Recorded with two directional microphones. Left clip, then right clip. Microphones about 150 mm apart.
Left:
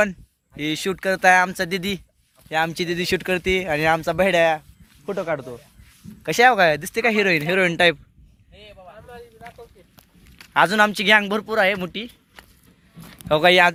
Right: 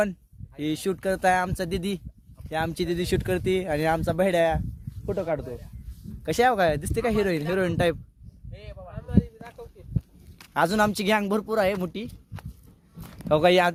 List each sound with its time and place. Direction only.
0.0 s speech: 5° left (ahead or behind)
8.5 s a sound: 15° right (ahead or behind)
10.3 s speech: centre (ahead or behind)
13.2 s speech: 5° right (ahead or behind)